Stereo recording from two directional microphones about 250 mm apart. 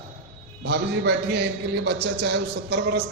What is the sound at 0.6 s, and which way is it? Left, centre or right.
A man's voice, right.